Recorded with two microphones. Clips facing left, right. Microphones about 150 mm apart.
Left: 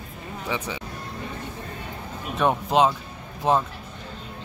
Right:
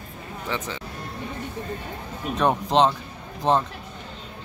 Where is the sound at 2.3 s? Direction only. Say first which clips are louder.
Even; centre (ahead or behind).